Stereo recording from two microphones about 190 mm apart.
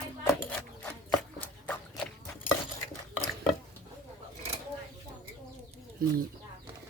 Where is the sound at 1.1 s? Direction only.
5° left (ahead or behind).